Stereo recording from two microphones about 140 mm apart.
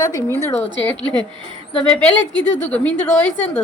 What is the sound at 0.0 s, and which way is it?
Speech, 25° left (ahead or behind).